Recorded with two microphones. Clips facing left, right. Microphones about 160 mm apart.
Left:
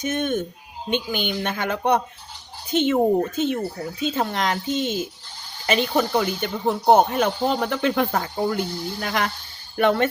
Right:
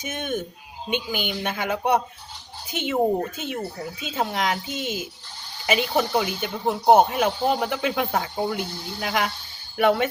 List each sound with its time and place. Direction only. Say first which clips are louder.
0.0 s speech: left 5 dB; 10° right (ahead or behind)